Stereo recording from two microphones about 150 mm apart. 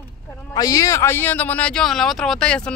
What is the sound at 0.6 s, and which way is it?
Speech, 25° left (ahead or behind).